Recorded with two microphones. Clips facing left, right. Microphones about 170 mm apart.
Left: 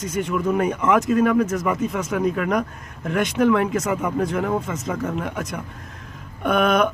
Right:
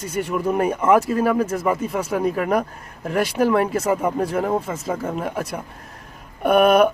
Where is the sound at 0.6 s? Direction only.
30° right (ahead or behind).